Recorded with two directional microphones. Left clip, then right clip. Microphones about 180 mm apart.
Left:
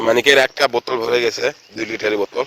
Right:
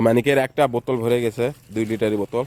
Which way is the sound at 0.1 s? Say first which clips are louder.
Left 6 dB; centre (ahead or behind).